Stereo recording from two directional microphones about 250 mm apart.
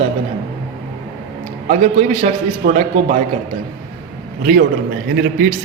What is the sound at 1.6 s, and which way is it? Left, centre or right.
A man's voice, right.